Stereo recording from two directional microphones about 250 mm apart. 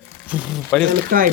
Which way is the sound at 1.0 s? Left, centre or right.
Right.